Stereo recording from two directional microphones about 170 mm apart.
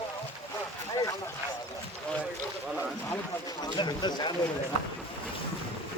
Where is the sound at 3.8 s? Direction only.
25° left (ahead or behind).